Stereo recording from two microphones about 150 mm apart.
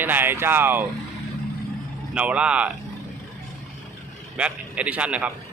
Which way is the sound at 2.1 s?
10° right (ahead or behind).